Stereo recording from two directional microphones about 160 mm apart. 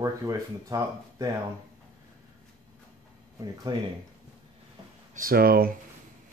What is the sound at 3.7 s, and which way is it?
Speech, 25° right (ahead or behind).